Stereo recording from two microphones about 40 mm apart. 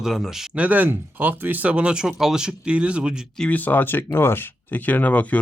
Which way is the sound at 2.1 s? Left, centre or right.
Centre.